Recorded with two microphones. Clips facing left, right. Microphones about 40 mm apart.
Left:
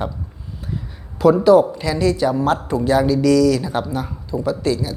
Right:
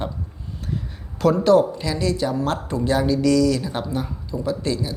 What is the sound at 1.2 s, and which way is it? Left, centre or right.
Speech, centre.